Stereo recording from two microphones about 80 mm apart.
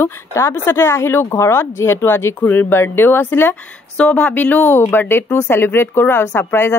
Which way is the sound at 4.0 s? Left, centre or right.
Centre.